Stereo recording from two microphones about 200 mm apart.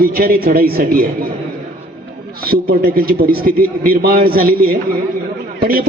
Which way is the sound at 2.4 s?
45° right (ahead or behind).